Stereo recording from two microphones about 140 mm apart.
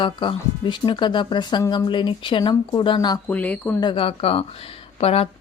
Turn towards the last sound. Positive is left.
turn(degrees=45)  # may be behind; listen again after turning